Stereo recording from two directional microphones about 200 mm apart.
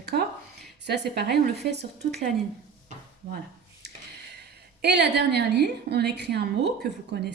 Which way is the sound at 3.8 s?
55° right (ahead or behind).